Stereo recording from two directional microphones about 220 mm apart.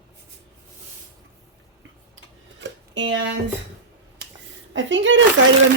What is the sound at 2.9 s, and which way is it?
Speech, 55° right (ahead or behind).